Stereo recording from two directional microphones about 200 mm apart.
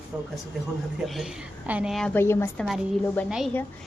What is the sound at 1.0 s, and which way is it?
A woman's voice, centre (ahead or behind).